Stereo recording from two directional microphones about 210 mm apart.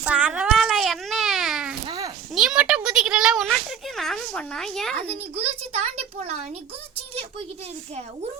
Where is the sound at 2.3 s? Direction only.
Centre (ahead or behind).